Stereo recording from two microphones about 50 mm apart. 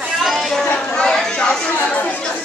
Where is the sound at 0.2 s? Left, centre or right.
Centre.